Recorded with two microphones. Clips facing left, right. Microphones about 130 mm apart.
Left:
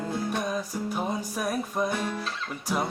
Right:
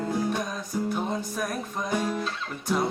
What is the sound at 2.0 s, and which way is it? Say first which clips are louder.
Guitar: right 3 dB; 10° right (ahead or behind).